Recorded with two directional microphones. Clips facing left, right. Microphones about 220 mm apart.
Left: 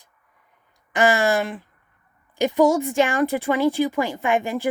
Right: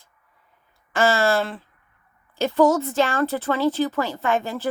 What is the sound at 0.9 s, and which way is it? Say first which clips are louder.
A woman's voice: left 1 dB; 15° left (ahead or behind).